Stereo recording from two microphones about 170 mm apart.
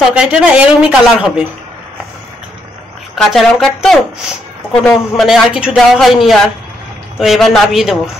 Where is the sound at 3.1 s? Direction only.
Centre (ahead or behind).